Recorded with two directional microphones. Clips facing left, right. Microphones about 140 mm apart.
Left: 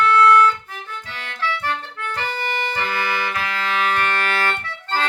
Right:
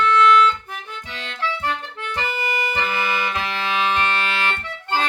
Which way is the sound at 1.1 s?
20° right (ahead or behind).